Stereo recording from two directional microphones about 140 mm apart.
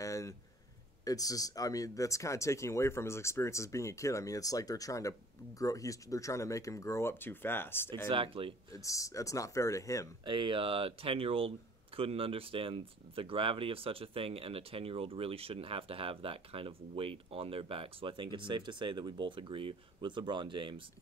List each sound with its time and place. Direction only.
0.0 s a sound: 25° left (ahead or behind)
1.0 s speech: 25° left (ahead or behind)
8.1 s speech: 40° right (ahead or behind)
8.7 s speech: 25° left (ahead or behind)
10.2 s speech: 35° right (ahead or behind)